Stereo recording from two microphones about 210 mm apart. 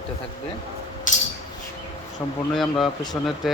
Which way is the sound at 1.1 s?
35° left (ahead or behind).